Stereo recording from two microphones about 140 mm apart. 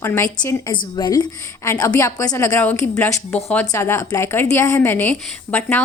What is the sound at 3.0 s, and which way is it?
A woman's voice, 15° left (ahead or behind).